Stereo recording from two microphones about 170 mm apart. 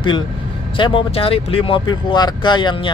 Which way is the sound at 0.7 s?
30° left (ahead or behind).